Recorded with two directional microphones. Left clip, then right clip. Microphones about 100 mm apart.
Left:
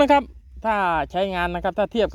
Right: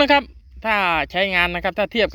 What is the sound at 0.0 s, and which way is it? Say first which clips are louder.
Speech: right 1 dB; 25° left (ahead or behind).